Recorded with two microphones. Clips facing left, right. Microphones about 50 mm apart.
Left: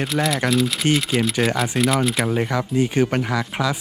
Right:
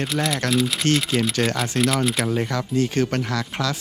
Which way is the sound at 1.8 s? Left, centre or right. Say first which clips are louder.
Left 1 dB; centre.